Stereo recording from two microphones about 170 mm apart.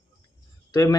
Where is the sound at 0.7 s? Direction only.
20° left (ahead or behind).